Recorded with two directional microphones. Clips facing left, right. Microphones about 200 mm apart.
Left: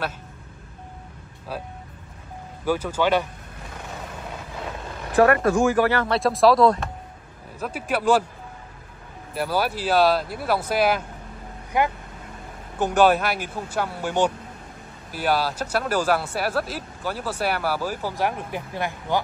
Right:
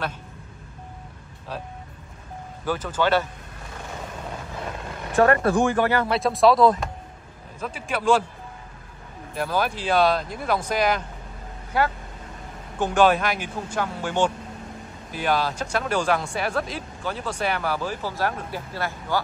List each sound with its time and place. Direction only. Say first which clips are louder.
2.6 s speech: left 2 dB; 10° left (ahead or behind)
5.3 s speech: left 1 dB; 30° right (ahead or behind)
6.1 s speech: left 1 dB; centre (ahead or behind)
9.3 s speech: left 1 dB; 5° left (ahead or behind)